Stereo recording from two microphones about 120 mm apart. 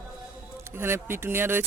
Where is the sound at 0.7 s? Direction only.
20° right (ahead or behind).